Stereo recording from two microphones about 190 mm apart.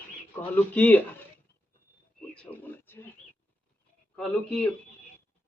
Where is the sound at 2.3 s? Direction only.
5° left (ahead or behind).